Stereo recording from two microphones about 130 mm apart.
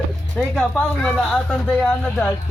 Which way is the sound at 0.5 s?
5° left (ahead or behind).